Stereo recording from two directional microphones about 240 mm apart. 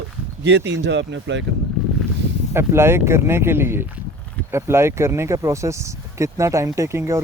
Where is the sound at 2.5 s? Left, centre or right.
Centre.